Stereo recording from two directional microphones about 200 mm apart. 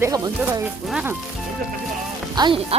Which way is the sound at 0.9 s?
5° right (ahead or behind).